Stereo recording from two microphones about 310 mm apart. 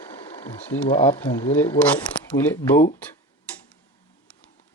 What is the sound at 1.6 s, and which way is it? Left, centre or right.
Speech, centre.